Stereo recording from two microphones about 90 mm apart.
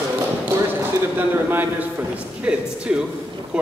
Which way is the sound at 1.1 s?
20° right (ahead or behind).